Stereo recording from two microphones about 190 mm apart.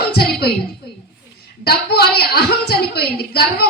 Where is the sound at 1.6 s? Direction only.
55° left (ahead or behind).